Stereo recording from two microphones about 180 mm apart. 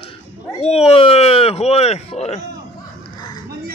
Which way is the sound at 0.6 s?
35° left (ahead or behind).